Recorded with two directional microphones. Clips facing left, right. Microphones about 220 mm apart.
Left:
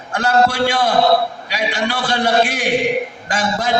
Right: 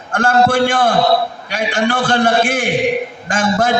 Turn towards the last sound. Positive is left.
turn(degrees=-50)  # may be behind; listen again after turning